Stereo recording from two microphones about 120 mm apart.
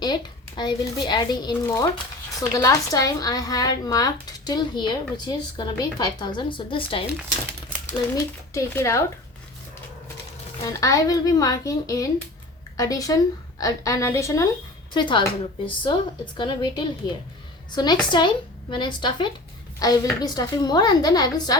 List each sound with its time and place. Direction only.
0.0 s a child's voice: 35° left (ahead or behind)
8.1 s a woman's voice: 25° left (ahead or behind)
10.6 s a woman's voice: 25° left (ahead or behind)
14.9 s a woman's voice: 40° left (ahead or behind)